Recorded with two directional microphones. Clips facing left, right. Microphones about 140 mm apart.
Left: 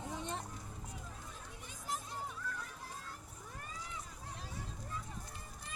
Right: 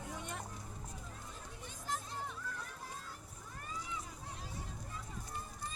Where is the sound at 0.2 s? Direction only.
30° left (ahead or behind).